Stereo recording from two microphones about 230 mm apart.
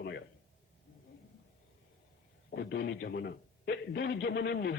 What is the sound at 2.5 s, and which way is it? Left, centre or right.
A man's voice, left.